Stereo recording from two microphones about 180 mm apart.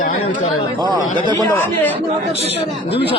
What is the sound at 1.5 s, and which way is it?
Speech, 10° left (ahead or behind).